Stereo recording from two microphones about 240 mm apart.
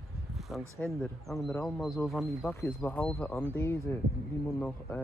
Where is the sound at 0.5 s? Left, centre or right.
Centre.